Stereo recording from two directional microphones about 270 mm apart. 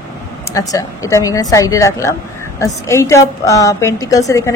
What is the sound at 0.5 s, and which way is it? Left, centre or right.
A woman's voice, centre.